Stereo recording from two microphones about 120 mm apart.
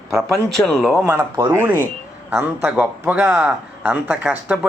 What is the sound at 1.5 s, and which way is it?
Speech, 20° right (ahead or behind).